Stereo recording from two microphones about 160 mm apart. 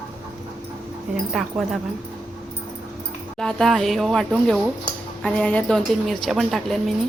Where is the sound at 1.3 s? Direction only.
Centre (ahead or behind).